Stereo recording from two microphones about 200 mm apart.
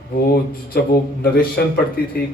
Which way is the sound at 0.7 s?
50° left (ahead or behind).